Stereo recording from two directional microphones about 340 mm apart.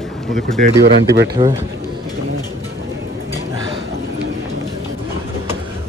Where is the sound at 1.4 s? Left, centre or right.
Centre.